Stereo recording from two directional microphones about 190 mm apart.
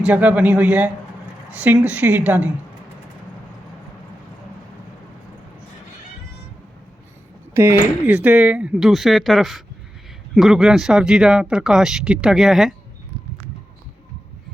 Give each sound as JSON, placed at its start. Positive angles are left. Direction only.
{"t": 0.0, "sound": "a woman's voice", "side_deg": -5}
{"t": 7.5, "sound": "speech", "side_deg": -10}